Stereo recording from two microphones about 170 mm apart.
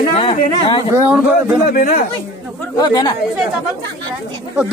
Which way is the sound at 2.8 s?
25° left (ahead or behind).